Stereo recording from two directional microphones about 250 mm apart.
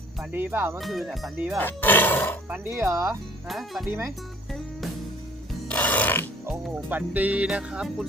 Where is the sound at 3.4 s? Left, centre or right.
Centre.